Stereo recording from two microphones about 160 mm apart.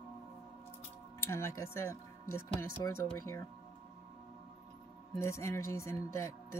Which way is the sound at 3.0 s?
20° left (ahead or behind).